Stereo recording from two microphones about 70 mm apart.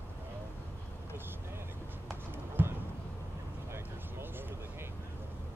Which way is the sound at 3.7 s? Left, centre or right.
Right.